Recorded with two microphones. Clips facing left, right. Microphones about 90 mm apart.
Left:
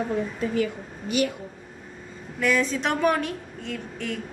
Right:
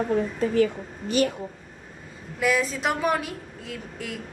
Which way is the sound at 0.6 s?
35° right (ahead or behind).